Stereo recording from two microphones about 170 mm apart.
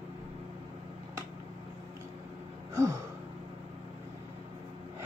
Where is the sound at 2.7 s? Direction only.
15° right (ahead or behind).